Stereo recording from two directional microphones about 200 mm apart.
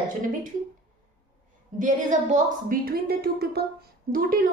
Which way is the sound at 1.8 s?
40° right (ahead or behind).